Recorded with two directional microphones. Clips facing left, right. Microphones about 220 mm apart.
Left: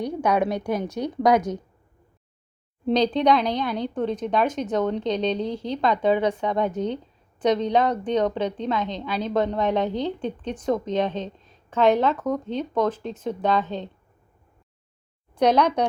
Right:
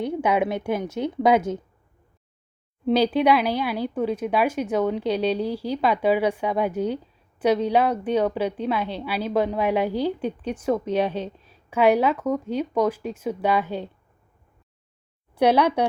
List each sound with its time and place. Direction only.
0.1 s a woman's voice: 5° right (ahead or behind)
1.0 s speech: 15° right (ahead or behind)
2.8 s speech: 5° right (ahead or behind)
15.4 s speech: 10° right (ahead or behind)